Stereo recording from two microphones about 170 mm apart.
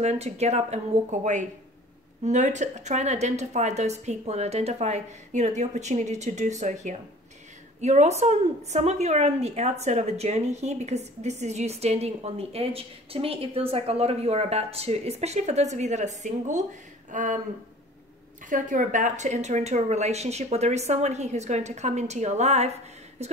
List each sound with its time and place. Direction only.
0.0 s a woman's voice: 40° right (ahead or behind)
18.5 s a woman's voice: 50° right (ahead or behind)